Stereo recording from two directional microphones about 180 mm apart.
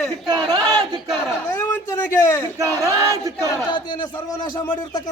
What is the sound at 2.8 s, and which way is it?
Battle cry, 15° right (ahead or behind).